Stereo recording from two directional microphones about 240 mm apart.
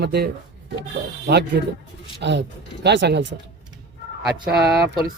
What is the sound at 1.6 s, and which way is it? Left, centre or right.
Speech, right.